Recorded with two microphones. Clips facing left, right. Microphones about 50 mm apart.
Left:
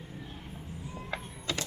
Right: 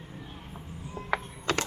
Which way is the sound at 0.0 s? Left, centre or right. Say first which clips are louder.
Even; centre.